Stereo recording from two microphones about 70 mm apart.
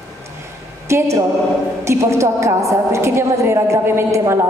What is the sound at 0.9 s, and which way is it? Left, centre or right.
A woman's voice, right.